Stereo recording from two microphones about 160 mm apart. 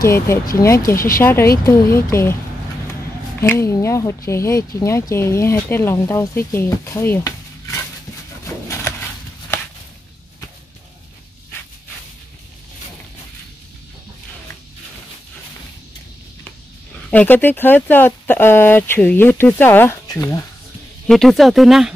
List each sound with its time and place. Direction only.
0.0 s speech: 20° left (ahead or behind)
0.8 s speech: 65° left (ahead or behind)
1.2 s speech: 15° left (ahead or behind)
3.3 s speech: 15° left (ahead or behind)
17.1 s speech: 10° left (ahead or behind)
21.1 s speech: centre (ahead or behind)